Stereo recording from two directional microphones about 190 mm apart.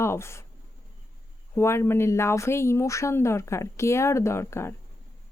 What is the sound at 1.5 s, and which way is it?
Speech, 15° left (ahead or behind).